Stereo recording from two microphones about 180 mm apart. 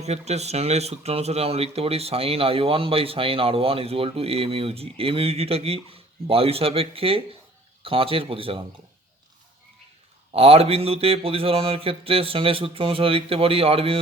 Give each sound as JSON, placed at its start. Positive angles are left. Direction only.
{"t": 0.0, "sound": "speech", "side_deg": -35}
{"t": 10.3, "sound": "speech", "side_deg": -35}